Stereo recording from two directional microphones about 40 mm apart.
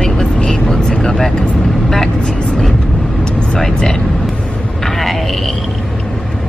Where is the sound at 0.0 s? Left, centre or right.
Centre.